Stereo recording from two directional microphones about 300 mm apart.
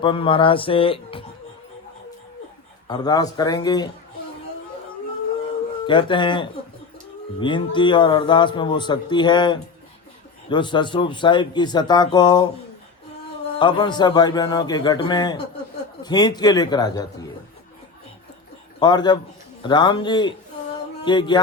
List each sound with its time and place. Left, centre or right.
0.0 s a man's voice: centre
2.8 s a man's voice: centre
5.8 s a man's voice: centre
13.6 s a man's voice: centre
18.8 s a man's voice: centre